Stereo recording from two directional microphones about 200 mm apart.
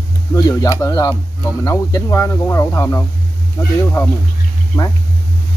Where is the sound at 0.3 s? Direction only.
20° left (ahead or behind).